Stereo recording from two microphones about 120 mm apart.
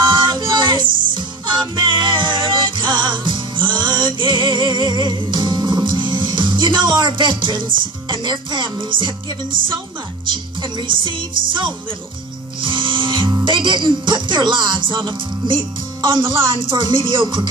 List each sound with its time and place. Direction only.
0.0 s music: 40° right (ahead or behind)
10.3 s speech: 40° right (ahead or behind)
12.6 s music: 45° right (ahead or behind)
13.4 s speech: 40° right (ahead or behind)